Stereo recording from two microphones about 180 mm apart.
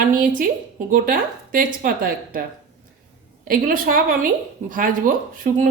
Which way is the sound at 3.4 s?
50° right (ahead or behind).